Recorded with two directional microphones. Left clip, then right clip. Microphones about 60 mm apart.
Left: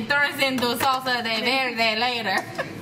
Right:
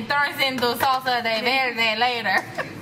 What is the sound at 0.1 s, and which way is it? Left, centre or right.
A woman's voice, right.